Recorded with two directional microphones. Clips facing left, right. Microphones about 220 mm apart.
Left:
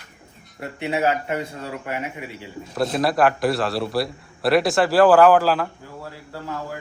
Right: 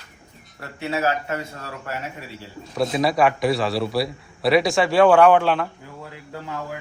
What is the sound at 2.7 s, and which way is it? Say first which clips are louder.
A man's voice: even; centre (ahead or behind).